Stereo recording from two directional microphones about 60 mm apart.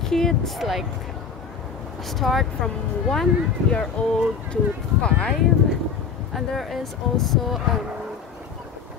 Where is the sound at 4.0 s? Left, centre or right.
Left.